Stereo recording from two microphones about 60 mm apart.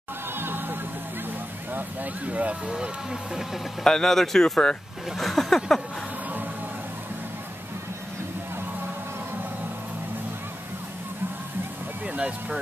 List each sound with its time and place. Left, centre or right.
0.4 s music: right
1.7 s speech: right; by 3.6 s centre
3.8 s speech: centre
12.1 s vehicle: centre